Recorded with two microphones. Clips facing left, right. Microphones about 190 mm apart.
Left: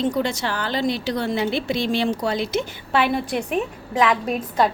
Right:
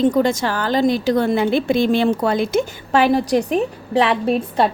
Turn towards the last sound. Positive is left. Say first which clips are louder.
# right 4 dB
turn(degrees=-30)  # may be behind; listen again after turning